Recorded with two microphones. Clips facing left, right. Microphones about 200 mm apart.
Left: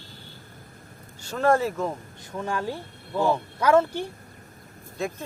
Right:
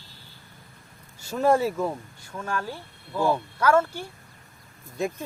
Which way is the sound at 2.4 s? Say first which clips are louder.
Left 3 dB; 20° left (ahead or behind).